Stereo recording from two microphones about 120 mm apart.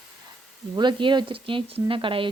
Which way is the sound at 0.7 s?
40° right (ahead or behind).